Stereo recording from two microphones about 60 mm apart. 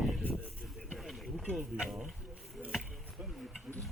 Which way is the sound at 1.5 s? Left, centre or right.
Centre.